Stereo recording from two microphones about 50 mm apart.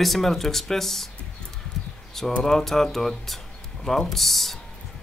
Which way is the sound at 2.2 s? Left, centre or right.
Centre.